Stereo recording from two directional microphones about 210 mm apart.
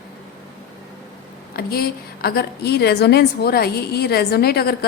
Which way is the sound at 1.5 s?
45° left (ahead or behind).